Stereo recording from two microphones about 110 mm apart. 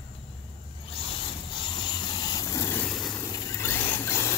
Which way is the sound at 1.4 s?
45° left (ahead or behind).